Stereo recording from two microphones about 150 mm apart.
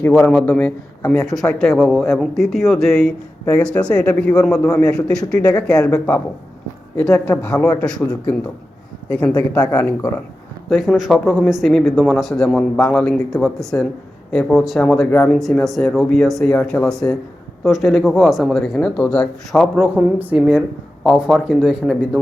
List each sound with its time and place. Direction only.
0.0 s a man's voice: 10° left (ahead or behind)
1.3 s a man's voice: centre (ahead or behind)
5.1 s speech: 25° left (ahead or behind)
5.5 s a man's voice: 5° left (ahead or behind)
10.7 s speech: centre (ahead or behind)